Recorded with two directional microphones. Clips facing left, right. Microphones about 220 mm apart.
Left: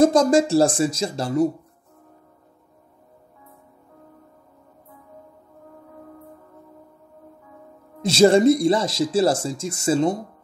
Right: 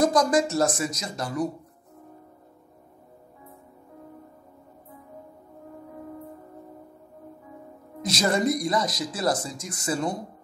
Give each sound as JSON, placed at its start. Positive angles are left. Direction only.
{"t": 0.0, "sound": "speech", "side_deg": 25}
{"t": 8.0, "sound": "speech", "side_deg": 30}